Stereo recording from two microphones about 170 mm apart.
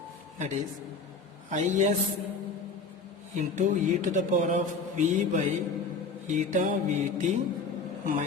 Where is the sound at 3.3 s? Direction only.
45° right (ahead or behind).